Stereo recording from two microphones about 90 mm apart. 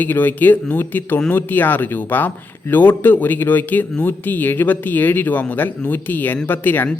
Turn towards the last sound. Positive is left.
turn(degrees=20)  # may be behind; listen again after turning